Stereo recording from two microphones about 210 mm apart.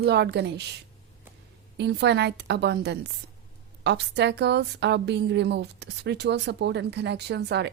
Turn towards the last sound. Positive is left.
turn(degrees=-50)  # may be behind; listen again after turning